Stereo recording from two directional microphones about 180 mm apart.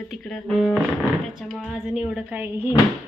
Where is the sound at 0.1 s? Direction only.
5° left (ahead or behind).